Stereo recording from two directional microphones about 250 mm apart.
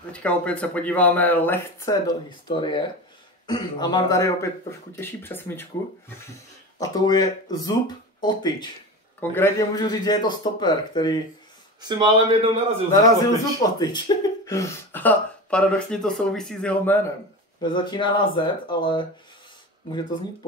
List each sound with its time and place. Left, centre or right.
0.1 s speech: centre
11.8 s a man's voice: centre
13.6 s speech: centre
17.6 s speech: centre